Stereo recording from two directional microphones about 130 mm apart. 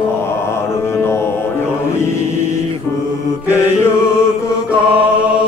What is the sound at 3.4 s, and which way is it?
Mantra, 20° left (ahead or behind).